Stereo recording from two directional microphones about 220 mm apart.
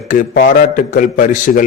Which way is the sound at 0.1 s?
35° left (ahead or behind).